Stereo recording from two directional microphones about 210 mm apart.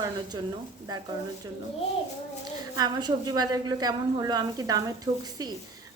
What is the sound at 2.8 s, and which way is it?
A woman's voice, 20° right (ahead or behind).